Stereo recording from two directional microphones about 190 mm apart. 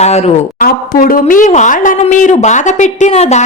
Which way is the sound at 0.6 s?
45° left (ahead or behind).